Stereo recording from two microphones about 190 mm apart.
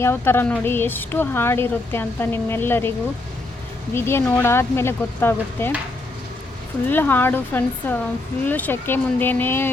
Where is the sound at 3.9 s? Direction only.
10° left (ahead or behind).